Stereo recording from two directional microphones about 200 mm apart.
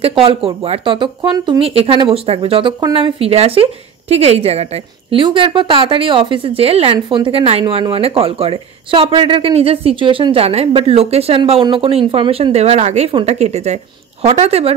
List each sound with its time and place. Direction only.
0.0 s a woman's voice: 25° right (ahead or behind)